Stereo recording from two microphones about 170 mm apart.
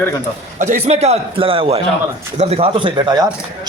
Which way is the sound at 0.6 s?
40° right (ahead or behind).